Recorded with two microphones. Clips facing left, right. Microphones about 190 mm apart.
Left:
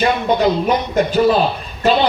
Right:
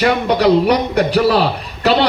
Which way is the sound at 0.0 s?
75° right (ahead or behind).